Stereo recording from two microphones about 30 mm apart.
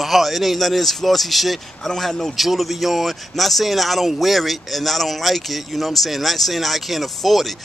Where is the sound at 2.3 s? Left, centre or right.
Centre.